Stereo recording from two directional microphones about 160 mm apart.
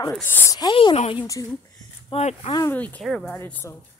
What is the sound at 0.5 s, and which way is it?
A woman's voice, 25° left (ahead or behind).